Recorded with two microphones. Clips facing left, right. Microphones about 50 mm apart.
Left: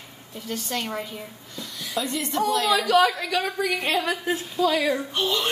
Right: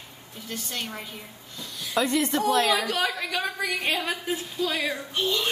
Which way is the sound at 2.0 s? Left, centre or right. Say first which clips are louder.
Right 3 dB; right.